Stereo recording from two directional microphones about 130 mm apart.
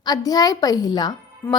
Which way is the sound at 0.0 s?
30° left (ahead or behind).